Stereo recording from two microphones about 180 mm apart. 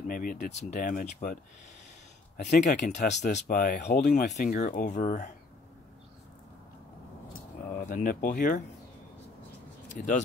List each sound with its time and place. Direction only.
0.1 s speech: 50° left (ahead or behind)
2.4 s speech: 40° left (ahead or behind)
7.8 s speech: 50° left (ahead or behind)
9.9 s speech: 45° left (ahead or behind)